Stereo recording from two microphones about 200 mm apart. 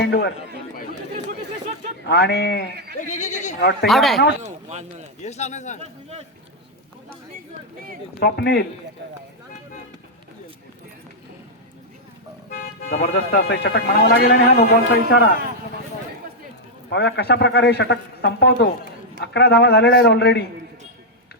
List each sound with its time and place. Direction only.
0.0 s a man's voice: 55° left (ahead or behind)
2.0 s a man's voice: 55° left (ahead or behind)
3.0 s speech: 35° left (ahead or behind)
3.6 s speech: 55° left (ahead or behind)
3.8 s speech: centre (ahead or behind)
4.4 s speech: 35° right (ahead or behind)
5.2 s speech: 35° left (ahead or behind)
5.8 s speech: 30° right (ahead or behind)
8.2 s a man's voice: 55° left (ahead or behind)
13.0 s a man's voice: 55° left (ahead or behind)
16.9 s a man's voice: 55° left (ahead or behind)